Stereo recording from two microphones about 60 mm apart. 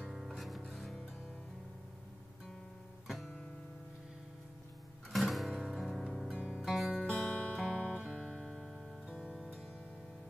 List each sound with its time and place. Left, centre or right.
0.1 s music: centre
5.1 s music: centre
6.3 s music: centre
6.6 s music: centre
7.1 s music: left; by 8.8 s centre
9.2 s music: centre